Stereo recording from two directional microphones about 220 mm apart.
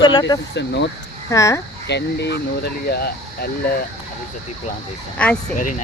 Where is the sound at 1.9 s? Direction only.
50° left (ahead or behind).